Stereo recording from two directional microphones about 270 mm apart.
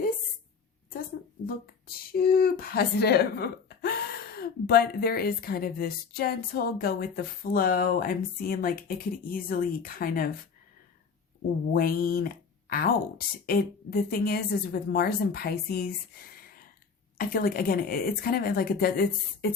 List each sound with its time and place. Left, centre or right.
2.1 s speech: left
11.7 s speech: left